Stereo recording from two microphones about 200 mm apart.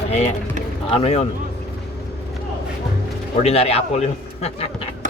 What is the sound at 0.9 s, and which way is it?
Speech, 30° left (ahead or behind).